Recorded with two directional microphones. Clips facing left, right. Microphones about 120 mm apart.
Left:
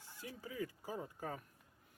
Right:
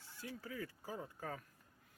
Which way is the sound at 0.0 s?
15° left (ahead or behind).